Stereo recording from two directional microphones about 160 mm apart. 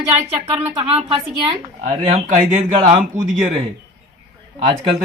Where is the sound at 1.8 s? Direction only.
45° right (ahead or behind).